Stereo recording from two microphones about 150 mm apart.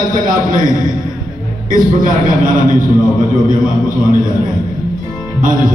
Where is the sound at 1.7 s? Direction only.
65° right (ahead or behind).